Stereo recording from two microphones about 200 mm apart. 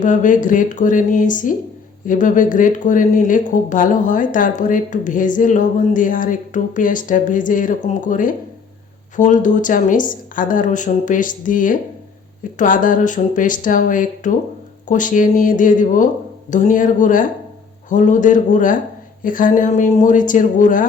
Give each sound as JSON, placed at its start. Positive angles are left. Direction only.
{"t": 0.0, "sound": "speech", "side_deg": 40}